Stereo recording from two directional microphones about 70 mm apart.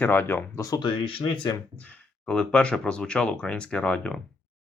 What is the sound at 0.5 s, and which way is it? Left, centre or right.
Speech, left.